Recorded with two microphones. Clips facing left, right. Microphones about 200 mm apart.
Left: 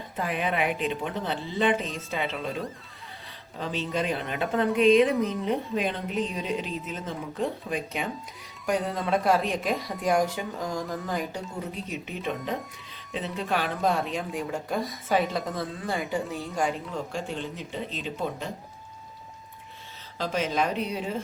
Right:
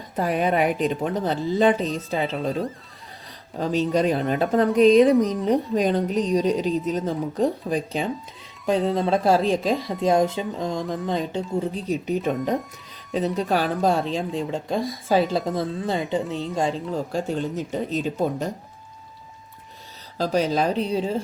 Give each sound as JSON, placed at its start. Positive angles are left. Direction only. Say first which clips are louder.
{"t": 0.2, "sound": "a woman's voice", "louder": "right 7 dB", "side_deg": -40}
{"t": 3.6, "sound": "a woman's voice", "louder": "right 8 dB", "side_deg": -40}
{"t": 11.9, "sound": "a woman's voice", "louder": "right 10 dB", "side_deg": -40}
{"t": 20.1, "sound": "a woman's voice", "louder": "right 5 dB", "side_deg": -35}